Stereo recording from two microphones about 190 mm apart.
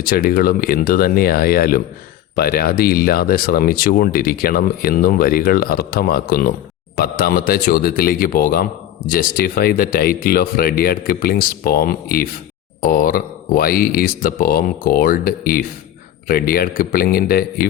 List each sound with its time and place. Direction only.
0.0 s speech: 50° left (ahead or behind)